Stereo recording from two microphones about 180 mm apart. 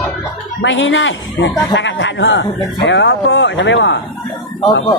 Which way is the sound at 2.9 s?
75° left (ahead or behind).